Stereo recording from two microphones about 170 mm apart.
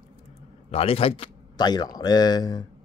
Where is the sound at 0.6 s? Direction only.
35° left (ahead or behind).